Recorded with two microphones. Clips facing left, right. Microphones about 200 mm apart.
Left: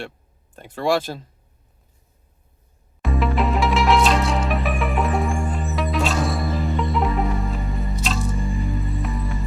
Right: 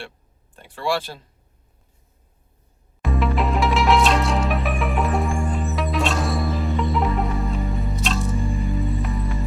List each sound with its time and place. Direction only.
0.5 s speech: 45° left (ahead or behind)
3.0 s music: centre (ahead or behind)